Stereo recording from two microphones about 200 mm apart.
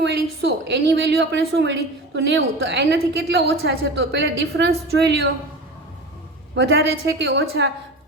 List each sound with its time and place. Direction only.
0.0 s a woman's voice: 60° right (ahead or behind)
6.6 s a woman's voice: 55° right (ahead or behind)